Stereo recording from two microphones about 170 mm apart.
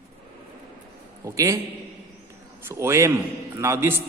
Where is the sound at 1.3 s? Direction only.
20° right (ahead or behind).